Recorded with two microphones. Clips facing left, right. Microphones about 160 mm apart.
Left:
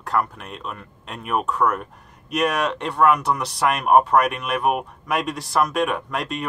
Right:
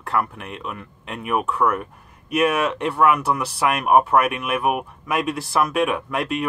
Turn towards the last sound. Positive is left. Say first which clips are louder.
# right 2 dB
turn(degrees=-5)  # may be behind; listen again after turning